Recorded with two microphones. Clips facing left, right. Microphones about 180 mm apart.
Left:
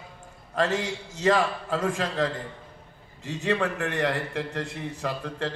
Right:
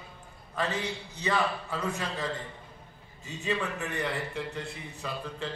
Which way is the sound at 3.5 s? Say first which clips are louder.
Left 5 dB; 80° left.